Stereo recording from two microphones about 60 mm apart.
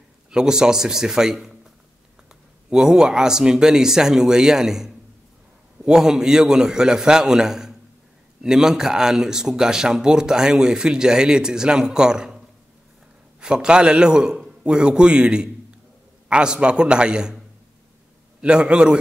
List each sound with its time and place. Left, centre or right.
0.3 s speech: centre
2.7 s speech: centre
13.4 s speech: centre
18.4 s speech: centre